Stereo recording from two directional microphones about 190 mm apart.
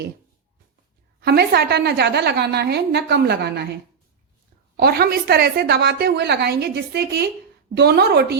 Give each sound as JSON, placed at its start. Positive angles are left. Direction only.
{"t": 1.2, "sound": "a woman's voice", "side_deg": -55}
{"t": 4.8, "sound": "a woman's voice", "side_deg": -55}